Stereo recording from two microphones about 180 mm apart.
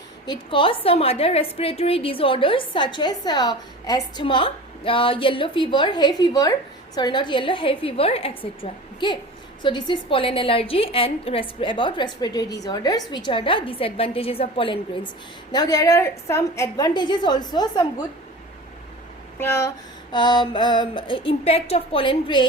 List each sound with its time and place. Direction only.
0.3 s a woman's voice: 30° left (ahead or behind)
15.5 s a woman's voice: 20° left (ahead or behind)
19.4 s a woman's voice: 15° left (ahead or behind)